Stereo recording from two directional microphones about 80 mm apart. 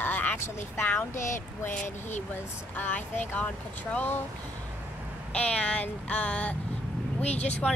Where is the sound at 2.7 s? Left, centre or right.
Left.